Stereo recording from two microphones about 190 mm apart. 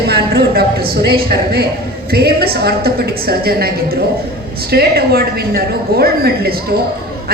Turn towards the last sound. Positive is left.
turn(degrees=-55)  # may be behind; listen again after turning